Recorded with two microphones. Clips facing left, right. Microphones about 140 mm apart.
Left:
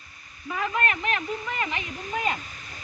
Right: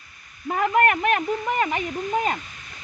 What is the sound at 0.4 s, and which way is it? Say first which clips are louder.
Speech: right 7 dB; 55° right (ahead or behind).